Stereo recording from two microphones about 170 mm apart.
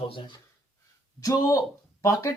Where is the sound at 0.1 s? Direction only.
30° left (ahead or behind).